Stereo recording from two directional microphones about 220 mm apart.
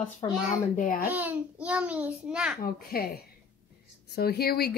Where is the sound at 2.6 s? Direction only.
40° left (ahead or behind).